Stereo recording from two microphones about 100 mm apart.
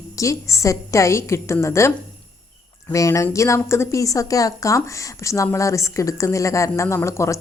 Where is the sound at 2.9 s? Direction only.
30° left (ahead or behind).